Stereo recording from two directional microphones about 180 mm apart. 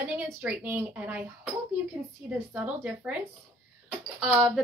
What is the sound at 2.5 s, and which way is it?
Speech, 10° right (ahead or behind).